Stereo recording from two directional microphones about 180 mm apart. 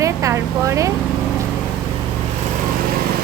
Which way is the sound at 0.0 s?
15° right (ahead or behind).